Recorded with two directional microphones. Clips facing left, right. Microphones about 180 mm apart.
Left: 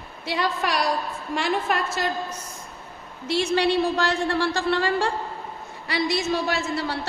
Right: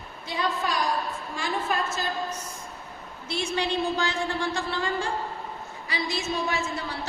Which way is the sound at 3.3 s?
70° left (ahead or behind).